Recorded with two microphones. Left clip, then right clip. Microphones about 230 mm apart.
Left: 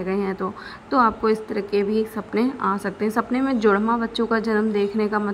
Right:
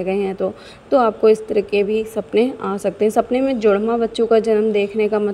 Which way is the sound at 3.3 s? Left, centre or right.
Right.